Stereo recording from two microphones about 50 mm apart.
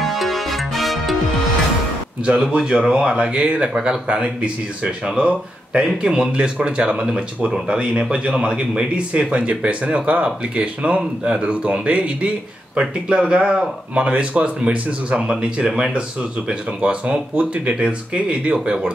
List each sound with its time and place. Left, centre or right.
0.0 s music: centre
2.2 s speech: centre